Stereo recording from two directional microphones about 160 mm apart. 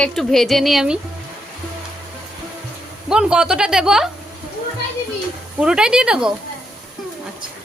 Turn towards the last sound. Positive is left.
turn(degrees=-5)  # may be behind; listen again after turning